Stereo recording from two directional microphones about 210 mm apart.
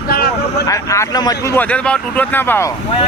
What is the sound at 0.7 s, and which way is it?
Speech, 15° left (ahead or behind).